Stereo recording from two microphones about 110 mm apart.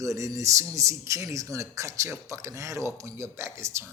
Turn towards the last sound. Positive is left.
turn(degrees=-25)  # may be behind; listen again after turning